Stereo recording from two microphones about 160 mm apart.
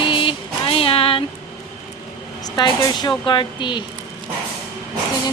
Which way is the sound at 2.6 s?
25° left (ahead or behind).